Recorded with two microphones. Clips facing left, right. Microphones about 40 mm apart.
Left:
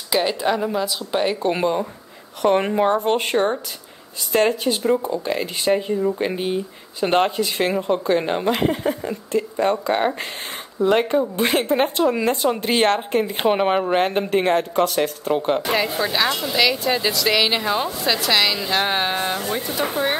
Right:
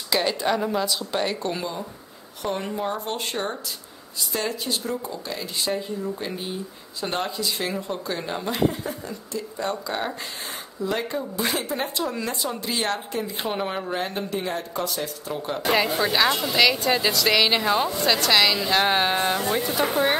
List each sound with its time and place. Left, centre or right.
0.1 s speech: centre
1.5 s speech: left
2.4 s speech: left
6.0 s speech: left
8.5 s speech: left
10.8 s speech: left
15.6 s speech: centre